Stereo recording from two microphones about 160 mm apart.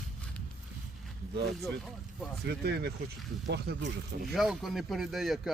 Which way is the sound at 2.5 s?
90° right.